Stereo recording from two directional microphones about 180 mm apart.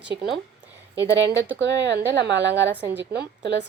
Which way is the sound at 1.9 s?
70° right (ahead or behind).